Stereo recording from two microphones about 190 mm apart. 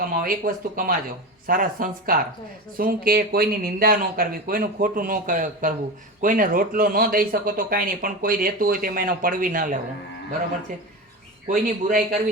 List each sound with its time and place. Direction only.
0.1 s speech: 45° right (ahead or behind)
11.4 s speech: 45° right (ahead or behind)